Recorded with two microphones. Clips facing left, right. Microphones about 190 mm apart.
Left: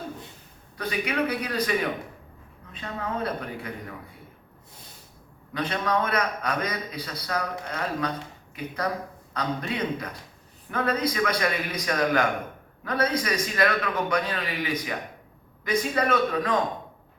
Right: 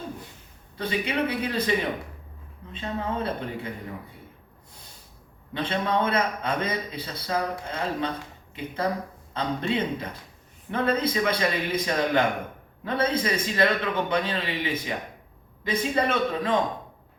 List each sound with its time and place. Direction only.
0.8 s a man's voice: 25° right (ahead or behind)
2.7 s a man's voice: 25° right (ahead or behind)
5.5 s a man's voice: 25° right (ahead or behind)